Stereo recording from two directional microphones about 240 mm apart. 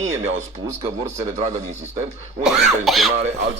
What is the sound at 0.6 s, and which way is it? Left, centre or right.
Speech, centre.